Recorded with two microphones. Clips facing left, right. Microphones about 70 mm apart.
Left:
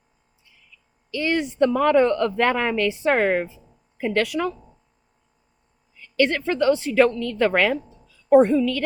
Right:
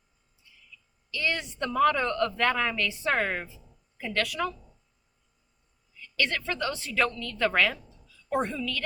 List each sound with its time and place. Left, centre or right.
1.1 s a woman's voice: left
4.1 s a woman's voice: left
6.0 s a woman's voice: left